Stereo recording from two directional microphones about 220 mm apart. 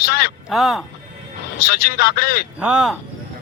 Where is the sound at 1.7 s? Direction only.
45° left (ahead or behind).